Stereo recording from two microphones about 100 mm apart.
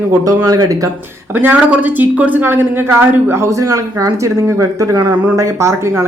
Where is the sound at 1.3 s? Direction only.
20° right (ahead or behind).